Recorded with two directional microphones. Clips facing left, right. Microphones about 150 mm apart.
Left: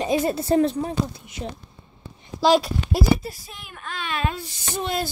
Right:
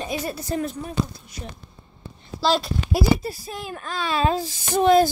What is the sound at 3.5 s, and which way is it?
Speech, 40° right (ahead or behind).